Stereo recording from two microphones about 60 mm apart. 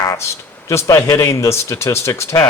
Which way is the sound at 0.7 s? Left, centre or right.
Left.